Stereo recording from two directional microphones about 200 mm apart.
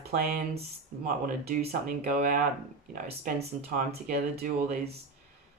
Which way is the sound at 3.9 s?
50° right (ahead or behind).